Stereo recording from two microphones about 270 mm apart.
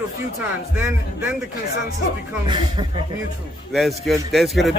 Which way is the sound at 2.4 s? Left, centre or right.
Centre.